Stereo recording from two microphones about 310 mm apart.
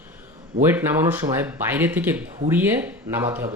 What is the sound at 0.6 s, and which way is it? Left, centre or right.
Speech, centre.